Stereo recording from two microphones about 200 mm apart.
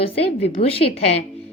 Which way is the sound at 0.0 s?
30° left (ahead or behind).